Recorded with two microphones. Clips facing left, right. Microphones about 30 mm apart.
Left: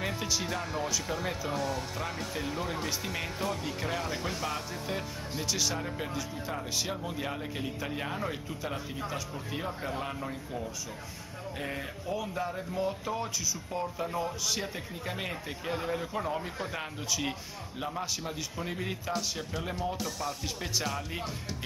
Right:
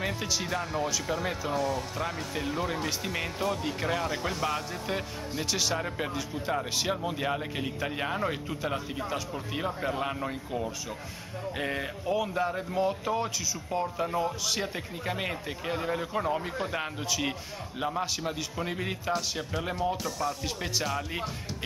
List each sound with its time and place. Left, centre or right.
0.0 s speech: centre